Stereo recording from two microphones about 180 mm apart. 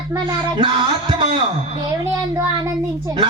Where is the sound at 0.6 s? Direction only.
30° right (ahead or behind).